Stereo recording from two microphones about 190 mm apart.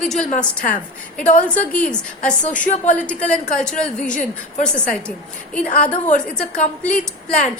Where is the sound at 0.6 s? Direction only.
45° left (ahead or behind).